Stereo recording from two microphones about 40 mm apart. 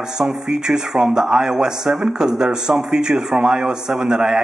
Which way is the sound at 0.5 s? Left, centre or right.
Centre.